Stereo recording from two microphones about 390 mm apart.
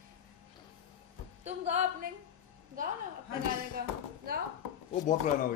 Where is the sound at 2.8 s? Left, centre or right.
Centre.